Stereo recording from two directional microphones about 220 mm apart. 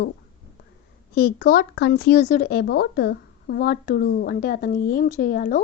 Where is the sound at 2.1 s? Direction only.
35° left (ahead or behind).